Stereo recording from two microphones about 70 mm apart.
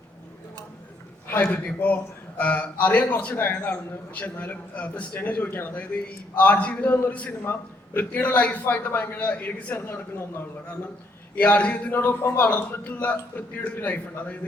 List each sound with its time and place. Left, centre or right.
1.6 s a man's voice: left
11.3 s a man's voice: left